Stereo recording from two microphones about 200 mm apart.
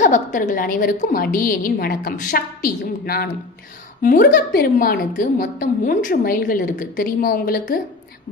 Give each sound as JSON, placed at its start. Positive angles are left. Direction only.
{"t": 0.0, "sound": "a woman's voice", "side_deg": 40}